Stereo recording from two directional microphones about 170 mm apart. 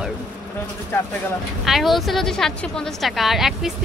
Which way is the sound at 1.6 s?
Centre (ahead or behind).